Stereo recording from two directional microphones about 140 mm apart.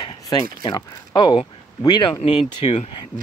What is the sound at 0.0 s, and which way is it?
Speech, 30° left (ahead or behind).